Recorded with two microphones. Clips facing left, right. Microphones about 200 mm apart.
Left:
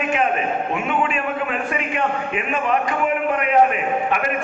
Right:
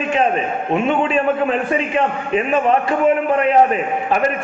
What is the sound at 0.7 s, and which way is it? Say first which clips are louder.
A man's voice: right 10 dB; 30° right (ahead or behind).